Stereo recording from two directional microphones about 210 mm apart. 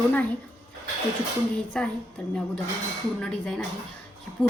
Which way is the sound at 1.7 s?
5° left (ahead or behind).